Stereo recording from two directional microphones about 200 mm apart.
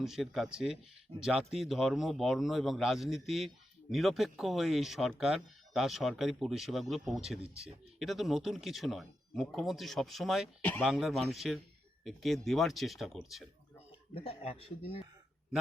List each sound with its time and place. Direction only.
0.0 s speech: centre (ahead or behind)
14.1 s speech: 30° left (ahead or behind)